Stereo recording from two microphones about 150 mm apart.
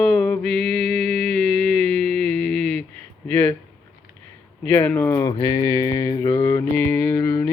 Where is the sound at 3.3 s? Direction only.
10° left (ahead or behind).